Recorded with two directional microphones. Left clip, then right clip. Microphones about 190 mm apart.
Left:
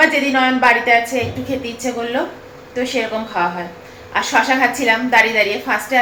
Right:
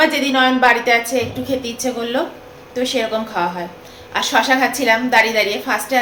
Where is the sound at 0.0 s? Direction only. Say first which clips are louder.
Left 1 dB; 15° right (ahead or behind).